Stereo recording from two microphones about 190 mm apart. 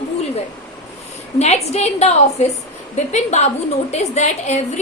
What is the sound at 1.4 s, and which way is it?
A woman's voice, 35° left (ahead or behind).